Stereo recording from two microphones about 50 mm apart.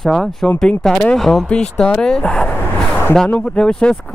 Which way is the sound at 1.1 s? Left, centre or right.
Centre.